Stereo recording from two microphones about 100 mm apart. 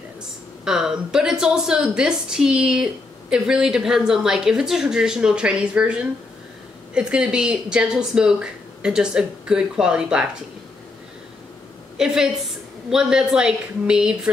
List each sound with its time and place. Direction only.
0.7 s a woman's voice: 5° right (ahead or behind)
12.0 s a woman's voice: 5° right (ahead or behind)